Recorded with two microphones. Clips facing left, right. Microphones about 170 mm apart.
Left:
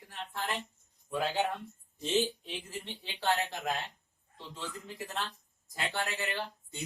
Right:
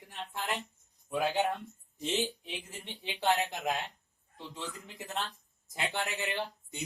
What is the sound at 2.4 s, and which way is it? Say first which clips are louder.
Speech: left 2 dB; 15° right (ahead or behind).